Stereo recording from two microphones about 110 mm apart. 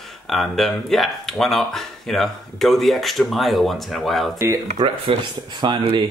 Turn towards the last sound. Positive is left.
turn(degrees=-45)  # may be behind; listen again after turning